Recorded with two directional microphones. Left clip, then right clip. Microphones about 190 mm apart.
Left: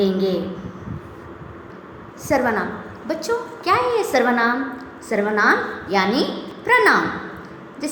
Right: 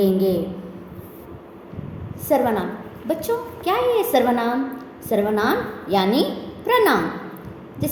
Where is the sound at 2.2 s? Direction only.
55° right (ahead or behind).